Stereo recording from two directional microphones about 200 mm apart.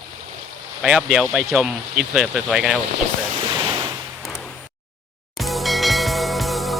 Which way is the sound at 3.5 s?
20° right (ahead or behind).